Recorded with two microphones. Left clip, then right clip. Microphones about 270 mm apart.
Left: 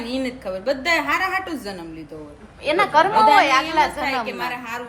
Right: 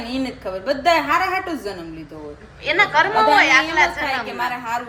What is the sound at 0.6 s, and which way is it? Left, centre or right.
A woman's voice, left.